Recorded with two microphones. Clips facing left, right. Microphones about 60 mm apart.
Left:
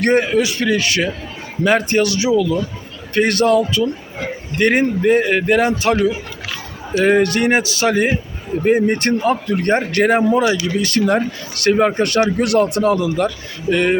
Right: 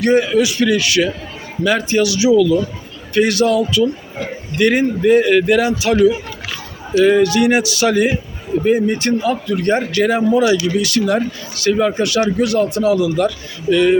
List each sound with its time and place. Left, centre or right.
0.0 s speech: left
0.3 s a man's voice: left
1.8 s speech: left
2.0 s a man's voice: left
3.2 s a man's voice: left
8.6 s speech: left
10.3 s a man's voice: left
12.4 s speech: left
12.9 s a man's voice: left